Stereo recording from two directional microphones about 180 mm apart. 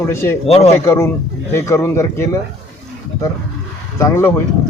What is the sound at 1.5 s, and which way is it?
Speech, 15° left (ahead or behind).